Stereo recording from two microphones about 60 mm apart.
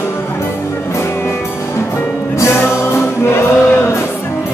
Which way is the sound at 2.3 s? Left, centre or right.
Left.